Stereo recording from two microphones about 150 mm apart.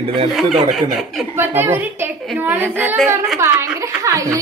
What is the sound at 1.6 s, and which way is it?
A man's voice, 15° right (ahead or behind).